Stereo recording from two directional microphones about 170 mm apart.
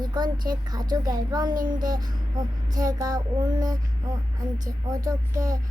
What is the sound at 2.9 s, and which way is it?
Speech, 20° right (ahead or behind).